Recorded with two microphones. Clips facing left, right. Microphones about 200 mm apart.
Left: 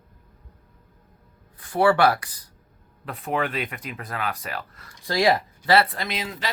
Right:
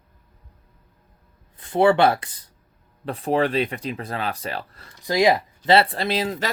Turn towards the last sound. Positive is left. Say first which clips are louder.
# right 7 dB
turn(degrees=-35)  # may be behind; listen again after turning